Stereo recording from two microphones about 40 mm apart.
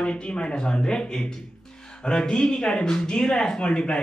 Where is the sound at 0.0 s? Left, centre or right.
Left.